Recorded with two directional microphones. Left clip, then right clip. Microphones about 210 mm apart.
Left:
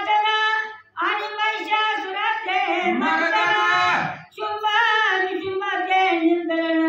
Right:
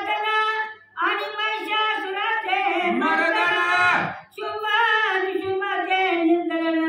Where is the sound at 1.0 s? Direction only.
15° left (ahead or behind).